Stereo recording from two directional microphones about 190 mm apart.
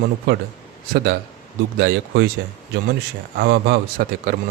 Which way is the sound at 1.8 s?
55° right (ahead or behind).